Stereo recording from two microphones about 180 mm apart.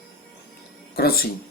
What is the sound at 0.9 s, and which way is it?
Speech, 60° left (ahead or behind).